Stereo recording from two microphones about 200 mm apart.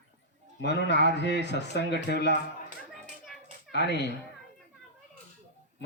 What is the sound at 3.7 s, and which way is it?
Speech, 60° left (ahead or behind).